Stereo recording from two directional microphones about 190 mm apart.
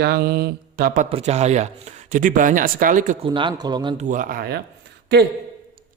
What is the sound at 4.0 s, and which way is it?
Speech, 40° right (ahead or behind).